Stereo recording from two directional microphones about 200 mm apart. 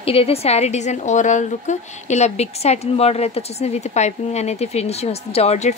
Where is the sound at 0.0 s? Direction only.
30° left (ahead or behind).